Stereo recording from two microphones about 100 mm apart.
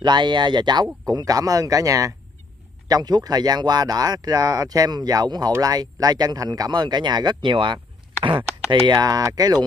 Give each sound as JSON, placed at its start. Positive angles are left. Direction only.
{"t": 0.0, "sound": "speech", "side_deg": -50}
{"t": 8.9, "sound": "speech", "side_deg": -35}